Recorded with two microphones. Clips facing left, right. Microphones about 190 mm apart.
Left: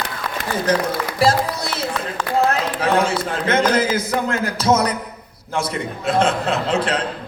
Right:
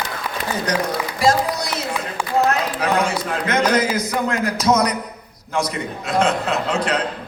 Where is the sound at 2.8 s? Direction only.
30° left (ahead or behind).